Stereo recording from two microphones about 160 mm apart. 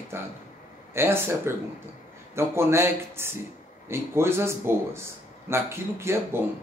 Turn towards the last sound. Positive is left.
turn(degrees=-15)  # may be behind; listen again after turning